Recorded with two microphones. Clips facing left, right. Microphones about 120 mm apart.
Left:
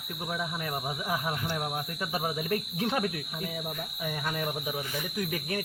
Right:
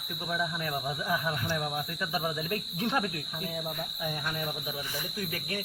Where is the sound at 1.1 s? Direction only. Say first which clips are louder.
Right 1 dB; 30° left (ahead or behind).